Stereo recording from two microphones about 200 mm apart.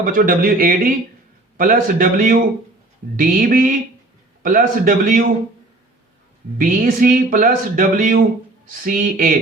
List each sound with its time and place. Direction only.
0.0 s speech: 45° right (ahead or behind)
6.6 s speech: 45° right (ahead or behind)